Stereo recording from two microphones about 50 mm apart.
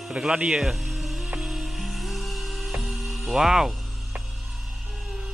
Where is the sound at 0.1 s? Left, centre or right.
Centre.